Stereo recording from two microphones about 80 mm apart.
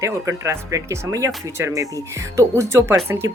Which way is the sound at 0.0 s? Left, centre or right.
Right.